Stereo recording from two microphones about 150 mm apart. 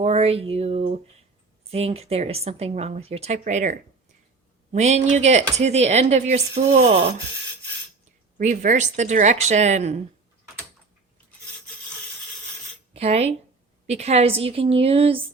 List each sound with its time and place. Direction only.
0.0 s speech: 45° right (ahead or behind)
8.4 s speech: 55° right (ahead or behind)
12.9 s a woman's voice: 45° right (ahead or behind)